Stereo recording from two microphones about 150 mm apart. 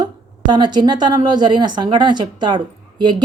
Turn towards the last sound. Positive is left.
turn(degrees=-30)  # may be behind; listen again after turning